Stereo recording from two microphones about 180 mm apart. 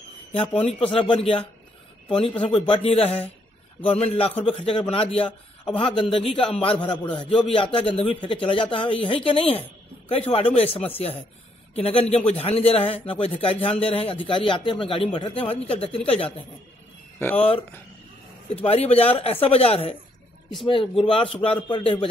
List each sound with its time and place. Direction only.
0.3 s a man's voice: 30° left (ahead or behind)
17.4 s a man's voice: 30° left (ahead or behind)